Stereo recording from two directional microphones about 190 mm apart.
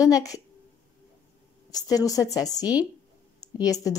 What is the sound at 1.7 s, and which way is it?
A woman's voice, 20° left (ahead or behind).